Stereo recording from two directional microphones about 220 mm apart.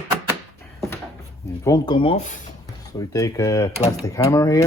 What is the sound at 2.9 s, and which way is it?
Speech, 15° left (ahead or behind).